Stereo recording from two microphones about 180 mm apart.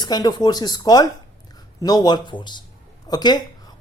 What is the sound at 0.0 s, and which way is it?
Speech, 20° left (ahead or behind).